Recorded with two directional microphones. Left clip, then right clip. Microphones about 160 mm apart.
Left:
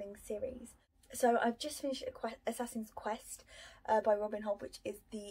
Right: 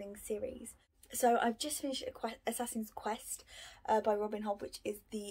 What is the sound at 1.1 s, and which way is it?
Speech, 20° right (ahead or behind).